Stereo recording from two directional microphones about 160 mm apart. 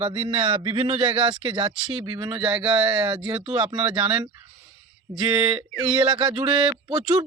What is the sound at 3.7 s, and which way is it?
Speech, 25° right (ahead or behind).